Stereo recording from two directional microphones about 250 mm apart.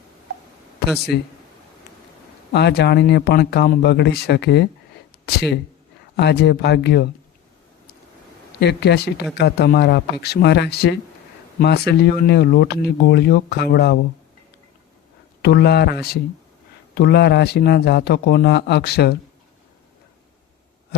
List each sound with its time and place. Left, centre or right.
0.9 s speech: centre
2.5 s speech: left
8.6 s speech: left
15.4 s speech: left